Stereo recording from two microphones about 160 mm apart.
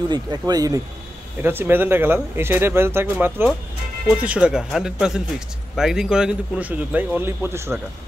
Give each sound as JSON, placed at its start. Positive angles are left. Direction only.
{"t": 0.1, "sound": "speech", "side_deg": -25}
{"t": 1.4, "sound": "speech", "side_deg": -15}